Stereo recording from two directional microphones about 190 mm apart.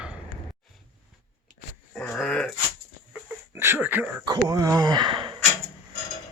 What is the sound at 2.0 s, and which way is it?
Dog, 5° left (ahead or behind).